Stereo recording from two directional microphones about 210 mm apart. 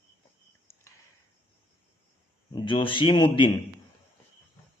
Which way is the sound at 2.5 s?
25° left (ahead or behind).